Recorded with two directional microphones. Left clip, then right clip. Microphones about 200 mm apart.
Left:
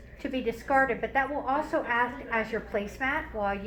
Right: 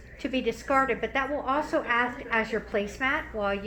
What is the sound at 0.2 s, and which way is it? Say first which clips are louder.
A woman's voice: right 2 dB; 45° right (ahead or behind).